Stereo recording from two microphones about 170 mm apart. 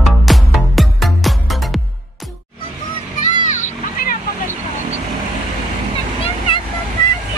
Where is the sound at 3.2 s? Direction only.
45° left (ahead or behind).